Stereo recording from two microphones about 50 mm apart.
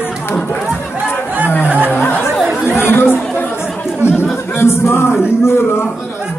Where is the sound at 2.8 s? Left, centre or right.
Left.